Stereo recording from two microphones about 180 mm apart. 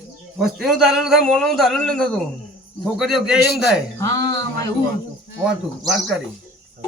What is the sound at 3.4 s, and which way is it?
Speech, 60° left (ahead or behind).